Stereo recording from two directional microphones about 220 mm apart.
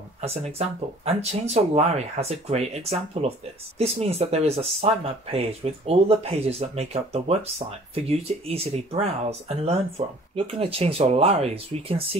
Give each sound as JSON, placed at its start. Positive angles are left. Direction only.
{"t": 0.2, "sound": "speech", "side_deg": -30}